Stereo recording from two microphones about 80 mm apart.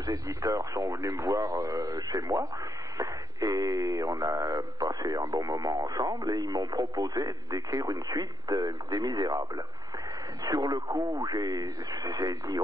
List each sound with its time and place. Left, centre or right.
0.0 s speech: right